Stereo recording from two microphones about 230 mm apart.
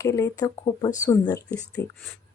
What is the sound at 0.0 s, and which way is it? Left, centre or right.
Speech, centre.